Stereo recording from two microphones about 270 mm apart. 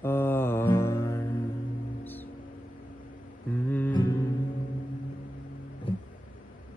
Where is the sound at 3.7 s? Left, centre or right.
Centre.